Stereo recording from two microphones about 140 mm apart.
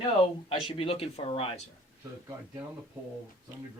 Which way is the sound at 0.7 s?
40° left (ahead or behind).